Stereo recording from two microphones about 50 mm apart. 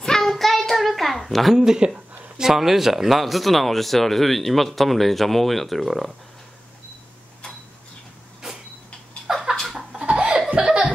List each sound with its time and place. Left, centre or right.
0.0 s child singing: centre
1.6 s speech: centre
9.3 s a sound: centre
9.6 s chicken: centre
9.9 s chuckle: right
10.5 s laughter: centre